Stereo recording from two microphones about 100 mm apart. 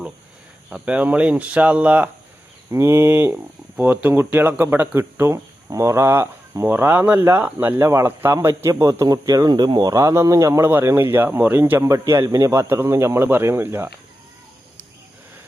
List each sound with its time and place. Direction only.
0.7 s speech: 10° right (ahead or behind)
2.6 s speech: 25° right (ahead or behind)